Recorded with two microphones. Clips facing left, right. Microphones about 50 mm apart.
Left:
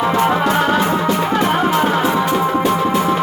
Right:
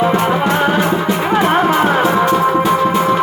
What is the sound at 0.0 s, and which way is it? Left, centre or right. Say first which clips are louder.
Music: right 1 dB; centre.